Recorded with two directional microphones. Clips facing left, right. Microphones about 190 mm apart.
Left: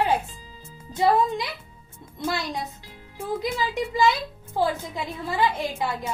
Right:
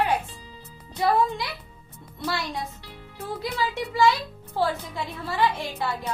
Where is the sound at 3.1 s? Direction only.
15° left (ahead or behind).